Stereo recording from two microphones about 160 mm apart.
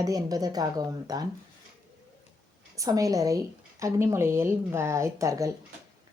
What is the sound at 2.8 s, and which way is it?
Speech, 20° right (ahead or behind).